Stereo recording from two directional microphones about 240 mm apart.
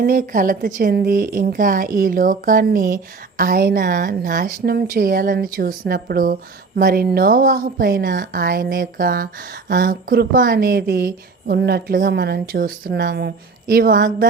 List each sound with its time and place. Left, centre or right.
0.0 s speech: right